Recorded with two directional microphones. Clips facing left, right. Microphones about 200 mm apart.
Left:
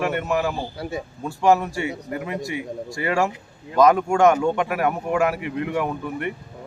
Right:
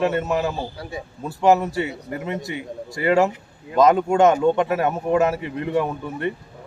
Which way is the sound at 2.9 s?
20° right (ahead or behind).